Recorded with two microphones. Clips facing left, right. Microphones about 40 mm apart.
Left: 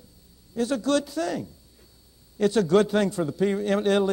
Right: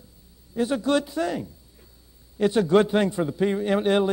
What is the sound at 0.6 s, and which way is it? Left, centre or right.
A man's voice, centre.